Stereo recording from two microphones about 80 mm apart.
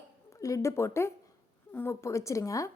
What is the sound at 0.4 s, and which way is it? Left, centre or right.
A woman's voice, left.